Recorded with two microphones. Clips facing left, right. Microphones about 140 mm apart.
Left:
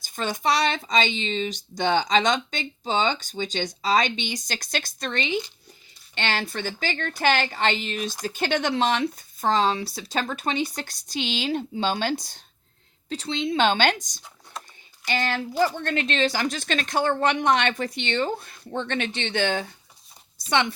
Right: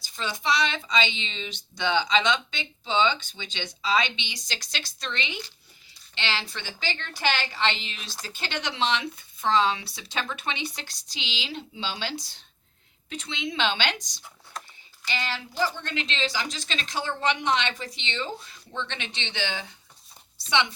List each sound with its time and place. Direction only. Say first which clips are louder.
0.0 s a woman's voice: left 5 dB; 50° left (ahead or behind)
13.1 s a woman's voice: left 7 dB; 35° left (ahead or behind)
13.6 s a woman's voice: left 6 dB; 45° left (ahead or behind)